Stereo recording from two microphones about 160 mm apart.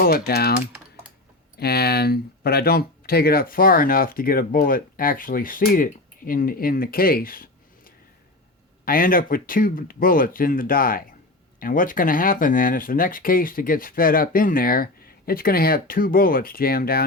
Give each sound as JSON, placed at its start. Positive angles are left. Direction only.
{"t": 0.0, "sound": "speech", "side_deg": 70}
{"t": 1.5, "sound": "speech", "side_deg": 80}